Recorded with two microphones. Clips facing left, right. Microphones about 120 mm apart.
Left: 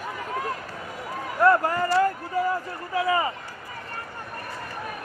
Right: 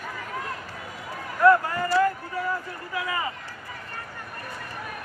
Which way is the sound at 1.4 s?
30° left (ahead or behind).